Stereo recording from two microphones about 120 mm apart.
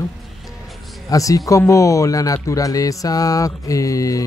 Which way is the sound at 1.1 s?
30° left (ahead or behind).